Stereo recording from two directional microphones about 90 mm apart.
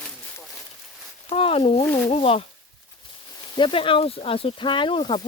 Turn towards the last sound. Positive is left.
turn(degrees=70)  # may be behind; listen again after turning